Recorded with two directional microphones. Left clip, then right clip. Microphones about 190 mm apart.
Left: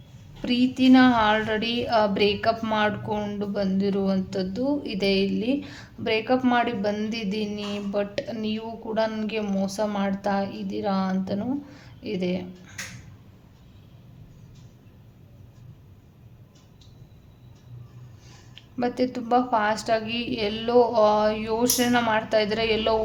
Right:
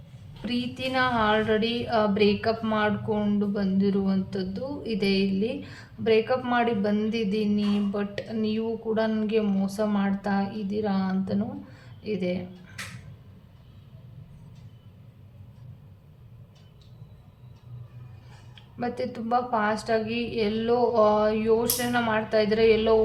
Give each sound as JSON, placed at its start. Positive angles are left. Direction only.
{"t": 0.4, "sound": "a woman's voice", "side_deg": 40}
{"t": 18.8, "sound": "a woman's voice", "side_deg": 40}